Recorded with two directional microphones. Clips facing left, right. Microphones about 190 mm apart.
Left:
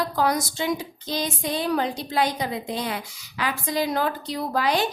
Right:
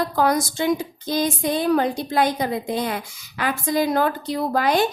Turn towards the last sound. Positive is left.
turn(degrees=-50)  # may be behind; listen again after turning